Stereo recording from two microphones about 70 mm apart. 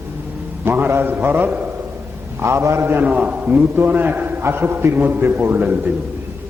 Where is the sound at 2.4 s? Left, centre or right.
Right.